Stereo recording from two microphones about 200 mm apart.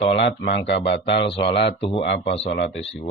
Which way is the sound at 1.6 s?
55° left (ahead or behind).